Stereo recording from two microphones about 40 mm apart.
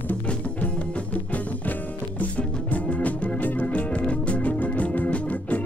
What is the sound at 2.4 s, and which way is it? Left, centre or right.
Music, left.